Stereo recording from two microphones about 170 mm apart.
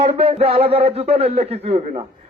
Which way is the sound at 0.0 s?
35° right (ahead or behind).